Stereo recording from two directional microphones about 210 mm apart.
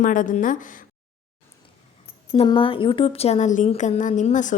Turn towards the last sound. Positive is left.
turn(degrees=35)  # may be behind; listen again after turning